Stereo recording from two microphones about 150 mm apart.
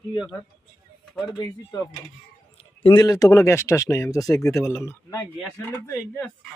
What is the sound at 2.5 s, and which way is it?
Speech, 35° left (ahead or behind).